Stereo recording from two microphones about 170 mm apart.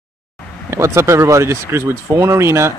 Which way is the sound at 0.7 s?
15° right (ahead or behind).